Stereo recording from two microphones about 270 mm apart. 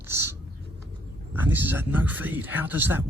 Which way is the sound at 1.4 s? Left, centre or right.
Centre.